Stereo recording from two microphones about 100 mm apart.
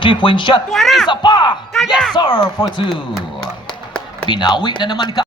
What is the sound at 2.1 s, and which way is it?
Speech, 45° left (ahead or behind).